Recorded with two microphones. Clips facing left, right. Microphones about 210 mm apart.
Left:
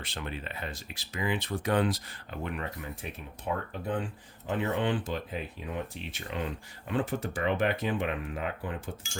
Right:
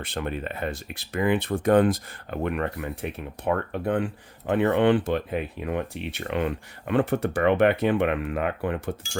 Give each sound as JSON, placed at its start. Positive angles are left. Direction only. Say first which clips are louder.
{"t": 0.0, "sound": "speech", "louder": "right 8 dB", "side_deg": -55}